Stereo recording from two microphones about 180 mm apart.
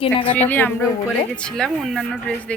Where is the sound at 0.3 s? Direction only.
10° left (ahead or behind).